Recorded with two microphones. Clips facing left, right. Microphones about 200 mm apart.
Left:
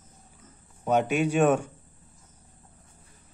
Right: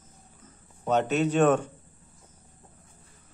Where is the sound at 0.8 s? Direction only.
10° left (ahead or behind).